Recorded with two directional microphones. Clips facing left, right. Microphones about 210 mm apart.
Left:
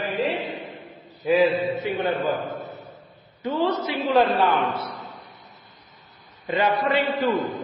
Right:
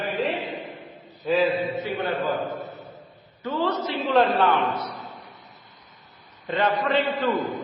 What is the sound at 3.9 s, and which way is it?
Speech, centre (ahead or behind).